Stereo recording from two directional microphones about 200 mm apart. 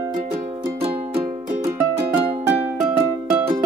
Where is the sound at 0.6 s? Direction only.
30° right (ahead or behind).